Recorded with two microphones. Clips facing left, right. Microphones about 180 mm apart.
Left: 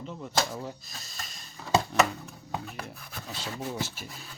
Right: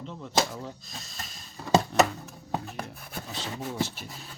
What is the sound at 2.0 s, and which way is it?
Music, 40° right (ahead or behind).